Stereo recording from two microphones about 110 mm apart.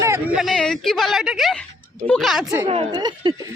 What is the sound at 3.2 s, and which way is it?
Speech, 40° right (ahead or behind).